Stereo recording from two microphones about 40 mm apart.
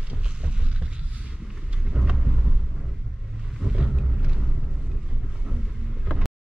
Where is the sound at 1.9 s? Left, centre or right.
Centre.